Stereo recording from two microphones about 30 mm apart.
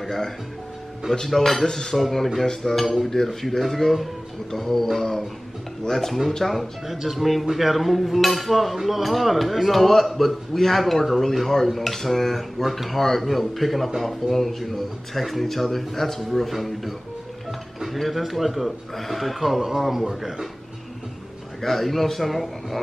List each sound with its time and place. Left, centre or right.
0.0 s speech: centre
1.7 s speech: centre
2.0 s speech: centre
6.4 s a man's voice: centre
11.4 s a man's voice: centre
17.9 s a man's voice: centre
21.5 s a man's voice: centre